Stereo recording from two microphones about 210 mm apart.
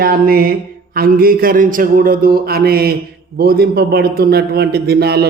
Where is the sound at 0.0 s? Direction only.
45° right (ahead or behind).